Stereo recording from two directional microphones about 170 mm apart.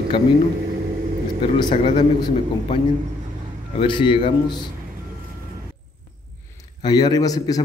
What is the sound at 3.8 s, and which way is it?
Speech, 30° left (ahead or behind).